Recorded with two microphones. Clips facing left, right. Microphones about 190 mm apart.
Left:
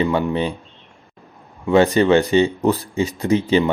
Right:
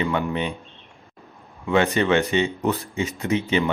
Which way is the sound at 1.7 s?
35° left (ahead or behind).